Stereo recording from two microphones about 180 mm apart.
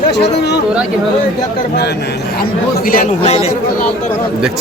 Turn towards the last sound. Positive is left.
turn(degrees=35)  # may be behind; listen again after turning